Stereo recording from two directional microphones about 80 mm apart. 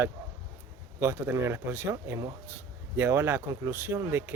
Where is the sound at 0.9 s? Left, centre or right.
Right.